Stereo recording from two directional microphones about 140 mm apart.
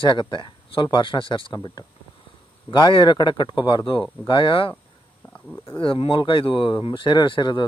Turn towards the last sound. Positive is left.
turn(degrees=35)  # may be behind; listen again after turning